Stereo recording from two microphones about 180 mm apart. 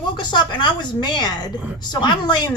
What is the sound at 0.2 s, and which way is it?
Speech, 25° left (ahead or behind).